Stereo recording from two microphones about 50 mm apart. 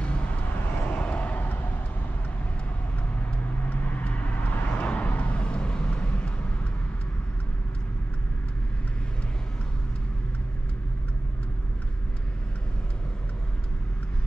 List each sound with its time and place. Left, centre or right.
0.7 s vehicle: left
3.2 s vehicle: left